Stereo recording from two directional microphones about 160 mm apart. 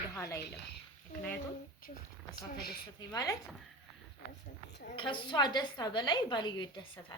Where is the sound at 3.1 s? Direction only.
25° left (ahead or behind).